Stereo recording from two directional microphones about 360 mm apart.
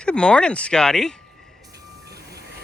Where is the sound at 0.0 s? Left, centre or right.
Centre.